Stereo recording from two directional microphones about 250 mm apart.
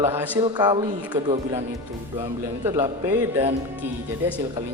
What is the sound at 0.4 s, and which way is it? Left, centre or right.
Speech, centre.